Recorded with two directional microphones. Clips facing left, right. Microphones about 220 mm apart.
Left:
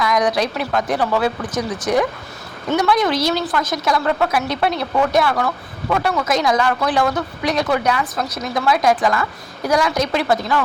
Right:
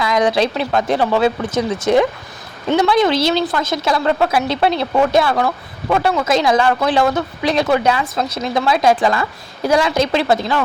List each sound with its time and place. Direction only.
0.0 s a woman's voice: 25° right (ahead or behind)